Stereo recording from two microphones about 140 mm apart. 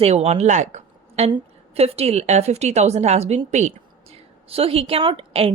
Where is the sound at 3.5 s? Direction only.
55° right (ahead or behind).